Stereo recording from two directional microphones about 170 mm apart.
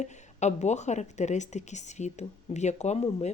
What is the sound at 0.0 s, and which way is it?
Speech, 40° left (ahead or behind).